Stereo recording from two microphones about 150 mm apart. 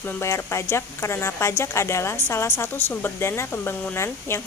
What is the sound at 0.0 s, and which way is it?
Speech, 15° left (ahead or behind).